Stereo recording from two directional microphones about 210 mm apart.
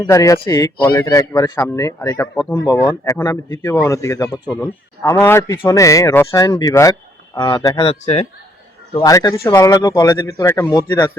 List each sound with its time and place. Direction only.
0.0 s speech: 15° left (ahead or behind)
9.0 s speech: 15° left (ahead or behind)